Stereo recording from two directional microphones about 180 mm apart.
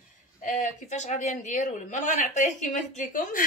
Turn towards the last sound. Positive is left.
turn(degrees=45)  # may be behind; listen again after turning